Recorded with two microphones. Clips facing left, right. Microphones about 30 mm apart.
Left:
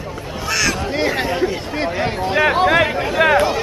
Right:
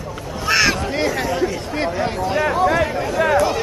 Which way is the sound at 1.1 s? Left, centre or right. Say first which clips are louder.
Left 1 dB; left.